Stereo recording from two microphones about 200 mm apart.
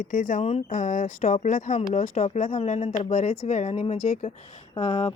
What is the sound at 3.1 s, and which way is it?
A woman's voice, 40° left (ahead or behind).